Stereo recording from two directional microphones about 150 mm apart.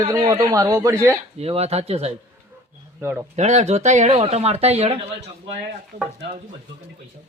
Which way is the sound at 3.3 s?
50° right (ahead or behind).